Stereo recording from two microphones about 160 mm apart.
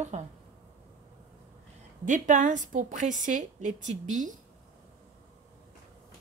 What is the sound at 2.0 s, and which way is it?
A woman's voice, 50° right (ahead or behind).